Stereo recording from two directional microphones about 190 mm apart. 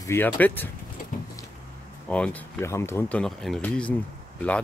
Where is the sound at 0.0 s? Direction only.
10° left (ahead or behind).